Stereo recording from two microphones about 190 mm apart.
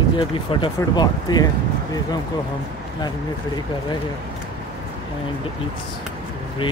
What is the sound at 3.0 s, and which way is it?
Speech, 20° left (ahead or behind).